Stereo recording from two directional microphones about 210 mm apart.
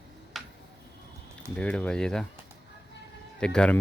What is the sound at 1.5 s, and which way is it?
Speech, 5° left (ahead or behind).